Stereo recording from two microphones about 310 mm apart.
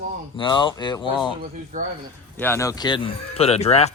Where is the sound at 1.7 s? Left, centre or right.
Right.